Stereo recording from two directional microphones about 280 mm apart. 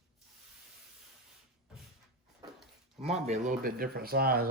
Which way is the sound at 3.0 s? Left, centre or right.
Right.